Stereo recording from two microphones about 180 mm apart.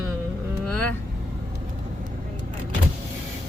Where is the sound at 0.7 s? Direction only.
5° left (ahead or behind).